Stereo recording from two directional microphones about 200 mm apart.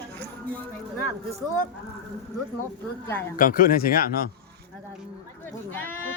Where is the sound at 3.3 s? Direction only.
45° left (ahead or behind).